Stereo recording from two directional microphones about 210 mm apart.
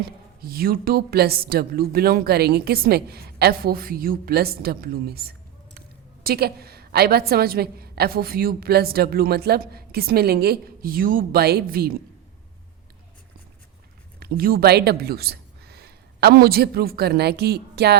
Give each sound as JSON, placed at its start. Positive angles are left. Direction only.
{"t": 0.4, "sound": "a woman's voice", "side_deg": -45}
{"t": 14.2, "sound": "speech", "side_deg": -45}